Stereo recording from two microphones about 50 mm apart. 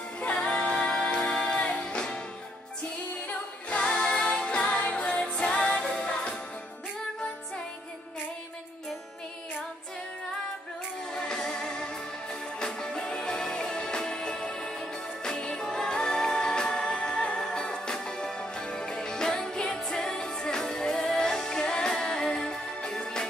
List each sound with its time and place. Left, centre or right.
0.2 s music: left
3.3 s music: left
4.6 s music: left
11.1 s music: centre